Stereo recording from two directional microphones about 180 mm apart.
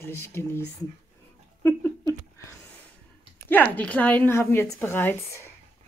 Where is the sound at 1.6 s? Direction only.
10° left (ahead or behind).